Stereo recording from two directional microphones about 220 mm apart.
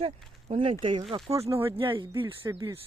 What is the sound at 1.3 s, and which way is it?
Speech, 15° right (ahead or behind).